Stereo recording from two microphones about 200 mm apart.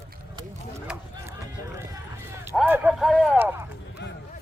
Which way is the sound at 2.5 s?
10° right (ahead or behind).